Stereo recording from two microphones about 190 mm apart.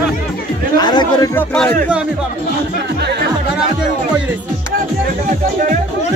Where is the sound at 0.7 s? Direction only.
20° left (ahead or behind).